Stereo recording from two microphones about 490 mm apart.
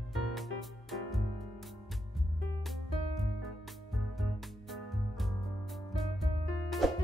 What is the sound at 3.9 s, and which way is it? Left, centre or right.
Music, centre.